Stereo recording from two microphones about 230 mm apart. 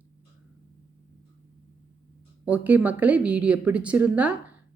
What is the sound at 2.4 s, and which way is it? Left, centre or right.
A woman's voice, centre.